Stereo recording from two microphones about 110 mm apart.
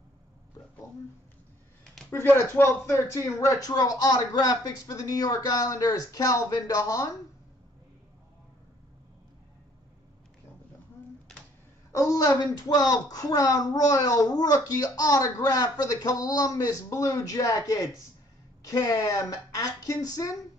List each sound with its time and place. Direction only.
2.0 s a woman's voice: 20° left (ahead or behind)
11.9 s a woman's voice: 30° left (ahead or behind)